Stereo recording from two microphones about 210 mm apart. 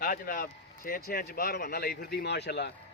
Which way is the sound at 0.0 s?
40° left (ahead or behind).